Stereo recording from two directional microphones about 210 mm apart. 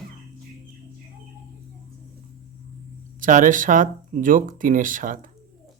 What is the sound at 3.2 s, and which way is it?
Speech, 40° right (ahead or behind).